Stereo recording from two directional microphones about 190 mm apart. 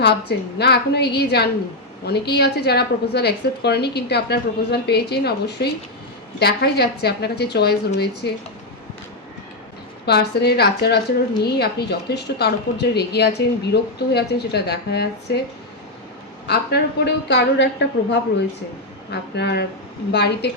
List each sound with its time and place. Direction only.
0.0 s a woman's voice: 60° left (ahead or behind)
10.1 s a woman's voice: 60° left (ahead or behind)
16.5 s a woman's voice: 60° left (ahead or behind)